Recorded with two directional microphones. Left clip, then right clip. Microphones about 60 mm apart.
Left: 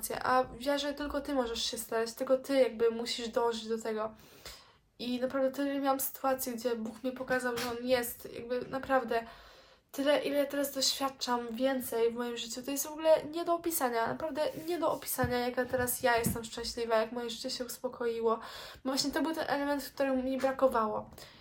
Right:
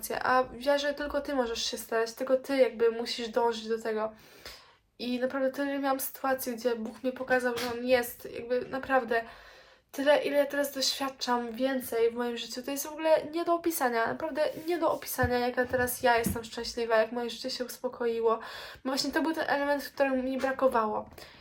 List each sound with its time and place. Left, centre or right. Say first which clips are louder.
0.1 s speech: right 3 dB; left
10.0 s speech: right 4 dB; left